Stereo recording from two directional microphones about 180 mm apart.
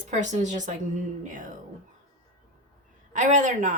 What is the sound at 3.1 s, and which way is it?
Speech, 45° right (ahead or behind).